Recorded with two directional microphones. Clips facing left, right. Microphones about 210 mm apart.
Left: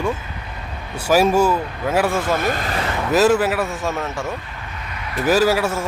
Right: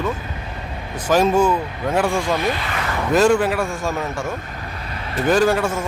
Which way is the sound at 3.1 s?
5° left (ahead or behind).